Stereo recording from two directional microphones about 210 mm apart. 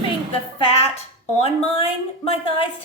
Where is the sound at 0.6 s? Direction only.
30° left (ahead or behind).